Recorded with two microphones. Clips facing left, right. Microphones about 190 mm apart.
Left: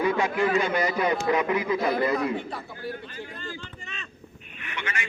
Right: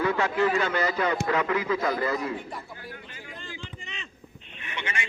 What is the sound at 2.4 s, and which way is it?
Speech, 70° left (ahead or behind).